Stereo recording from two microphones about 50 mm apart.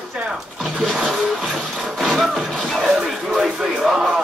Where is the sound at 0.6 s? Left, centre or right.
Centre.